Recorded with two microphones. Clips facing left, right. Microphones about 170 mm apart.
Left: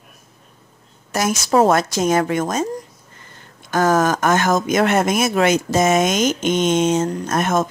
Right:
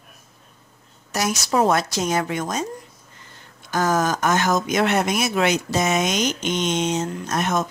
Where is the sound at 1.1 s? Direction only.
50° left (ahead or behind).